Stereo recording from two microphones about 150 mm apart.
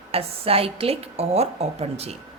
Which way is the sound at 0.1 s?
40° right (ahead or behind).